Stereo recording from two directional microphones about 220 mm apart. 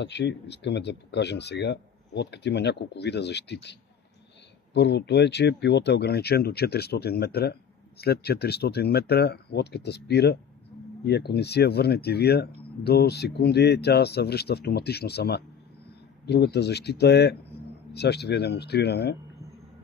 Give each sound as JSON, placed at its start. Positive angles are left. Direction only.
{"t": 0.0, "sound": "speech", "side_deg": 50}
{"t": 4.7, "sound": "speech", "side_deg": 50}